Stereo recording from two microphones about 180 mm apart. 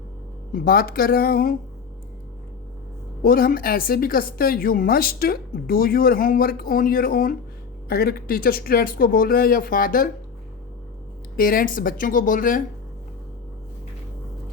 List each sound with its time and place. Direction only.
0.5 s speech: 55° left (ahead or behind)
3.2 s speech: 55° left (ahead or behind)
11.3 s speech: 55° left (ahead or behind)